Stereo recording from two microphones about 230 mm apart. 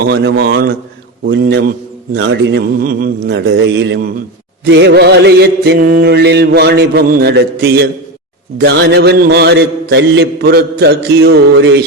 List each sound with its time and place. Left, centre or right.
0.0 s mantra: right